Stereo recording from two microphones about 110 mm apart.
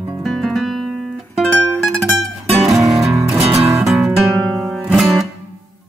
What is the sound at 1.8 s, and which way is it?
Music, centre (ahead or behind).